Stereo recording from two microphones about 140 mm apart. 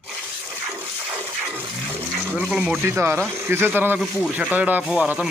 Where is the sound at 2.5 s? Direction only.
5° right (ahead or behind).